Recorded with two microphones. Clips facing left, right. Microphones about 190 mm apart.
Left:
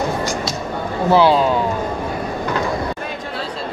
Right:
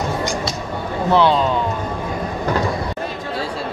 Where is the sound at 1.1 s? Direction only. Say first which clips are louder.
Left 2 dB; 5° left (ahead or behind).